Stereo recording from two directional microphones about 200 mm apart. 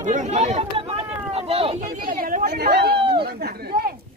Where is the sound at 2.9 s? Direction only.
25° right (ahead or behind).